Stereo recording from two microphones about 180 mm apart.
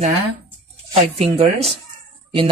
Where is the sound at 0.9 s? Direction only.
35° right (ahead or behind).